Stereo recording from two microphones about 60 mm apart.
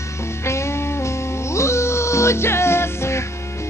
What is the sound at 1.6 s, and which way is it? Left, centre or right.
Music, left.